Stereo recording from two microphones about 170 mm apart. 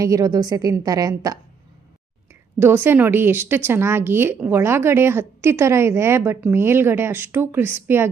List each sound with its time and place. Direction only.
0.0 s a woman's voice: 20° right (ahead or behind)
2.6 s a woman's voice: 15° right (ahead or behind)